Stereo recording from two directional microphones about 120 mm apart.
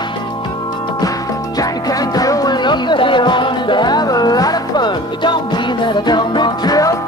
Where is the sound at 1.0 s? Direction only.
30° left (ahead or behind).